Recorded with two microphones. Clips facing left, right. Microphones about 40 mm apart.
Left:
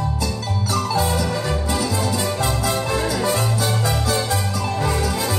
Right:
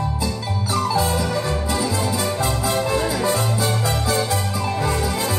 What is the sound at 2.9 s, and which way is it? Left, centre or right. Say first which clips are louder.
Music: right 1 dB; right.